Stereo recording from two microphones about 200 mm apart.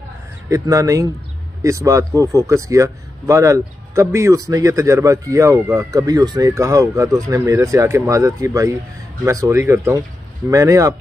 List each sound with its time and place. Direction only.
0.5 s speech: 15° right (ahead or behind)